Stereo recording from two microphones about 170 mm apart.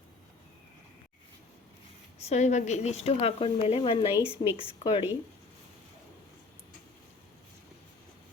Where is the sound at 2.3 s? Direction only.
45° left (ahead or behind).